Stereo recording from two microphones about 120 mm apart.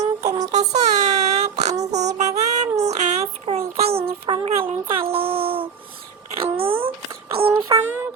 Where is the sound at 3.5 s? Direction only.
55° right (ahead or behind).